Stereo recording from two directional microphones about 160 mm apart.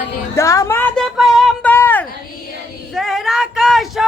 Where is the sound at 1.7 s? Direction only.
10° left (ahead or behind).